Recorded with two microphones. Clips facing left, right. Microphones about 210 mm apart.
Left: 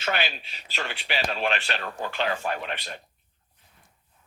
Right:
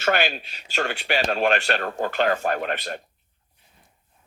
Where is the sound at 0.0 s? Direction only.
50° right (ahead or behind).